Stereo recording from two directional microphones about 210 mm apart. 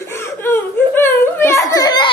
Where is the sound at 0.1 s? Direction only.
10° left (ahead or behind).